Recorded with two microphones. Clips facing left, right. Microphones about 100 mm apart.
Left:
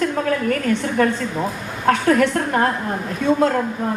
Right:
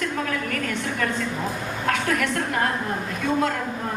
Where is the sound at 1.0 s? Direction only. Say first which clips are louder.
Left 5 dB; 40° left (ahead or behind).